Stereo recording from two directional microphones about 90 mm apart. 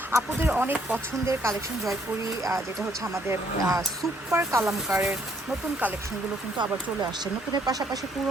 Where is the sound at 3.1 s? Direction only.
35° right (ahead or behind).